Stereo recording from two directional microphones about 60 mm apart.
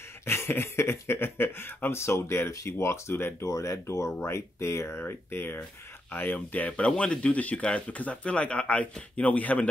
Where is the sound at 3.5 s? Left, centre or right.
Left.